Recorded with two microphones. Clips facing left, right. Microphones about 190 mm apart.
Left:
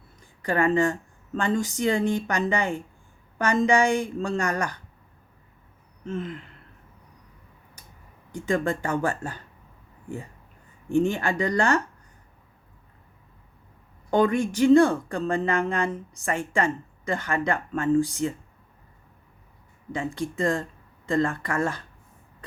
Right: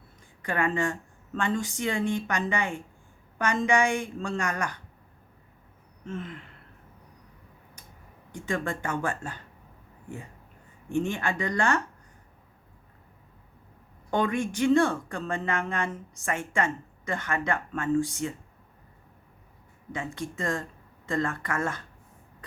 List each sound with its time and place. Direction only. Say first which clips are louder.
0.4 s speech: left 6 dB; 35° left (ahead or behind)
6.1 s speech: left 5 dB; 35° left (ahead or behind)
8.3 s speech: left 6 dB; 35° left (ahead or behind)
10.8 s speech: left 5 dB; 35° left (ahead or behind)
14.1 s speech: left 5 dB; 35° left (ahead or behind)
20.1 s speech: left 6 dB; 35° left (ahead or behind)